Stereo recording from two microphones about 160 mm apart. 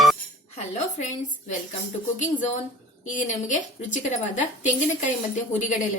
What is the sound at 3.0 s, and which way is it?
A woman's voice, 50° left (ahead or behind).